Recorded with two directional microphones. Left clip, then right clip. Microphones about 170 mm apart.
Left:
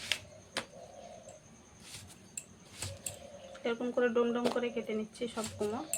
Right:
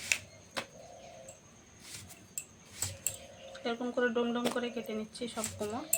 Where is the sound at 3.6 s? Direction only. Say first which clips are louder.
Left 1 dB; 20° left (ahead or behind).